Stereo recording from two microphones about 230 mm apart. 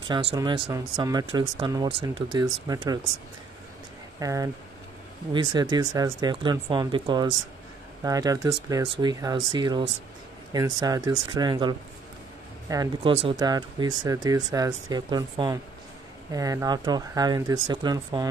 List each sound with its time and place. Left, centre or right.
0.1 s speech: right
4.2 s speech: centre